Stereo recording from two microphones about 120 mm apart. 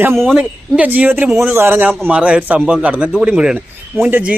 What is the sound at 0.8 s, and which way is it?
A man's voice, 15° right (ahead or behind).